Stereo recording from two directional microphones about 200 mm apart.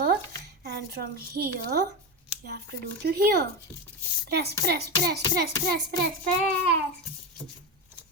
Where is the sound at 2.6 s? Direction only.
55° right (ahead or behind).